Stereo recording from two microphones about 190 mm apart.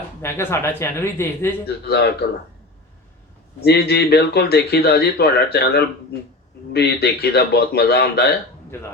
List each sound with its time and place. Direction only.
0.2 s speech: 15° left (ahead or behind)
1.6 s speech: 60° left (ahead or behind)
3.6 s speech: 60° left (ahead or behind)
8.7 s speech: 10° left (ahead or behind)